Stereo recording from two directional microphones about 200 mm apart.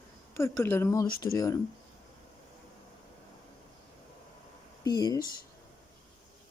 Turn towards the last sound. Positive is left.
turn(degrees=20)  # may be behind; listen again after turning